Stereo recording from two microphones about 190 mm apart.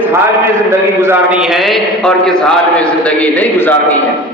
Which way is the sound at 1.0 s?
10° right (ahead or behind).